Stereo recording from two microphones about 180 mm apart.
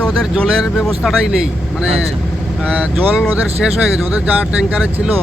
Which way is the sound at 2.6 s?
5° right (ahead or behind).